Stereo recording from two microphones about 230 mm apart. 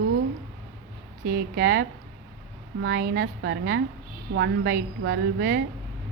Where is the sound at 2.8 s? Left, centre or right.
Right.